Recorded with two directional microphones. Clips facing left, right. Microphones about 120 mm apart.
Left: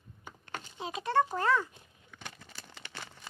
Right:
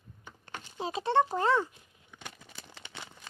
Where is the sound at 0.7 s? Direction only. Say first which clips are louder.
Right 2 dB; 30° right (ahead or behind).